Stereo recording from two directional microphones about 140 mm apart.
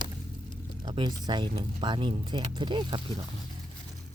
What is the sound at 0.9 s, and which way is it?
Speech, 30° right (ahead or behind).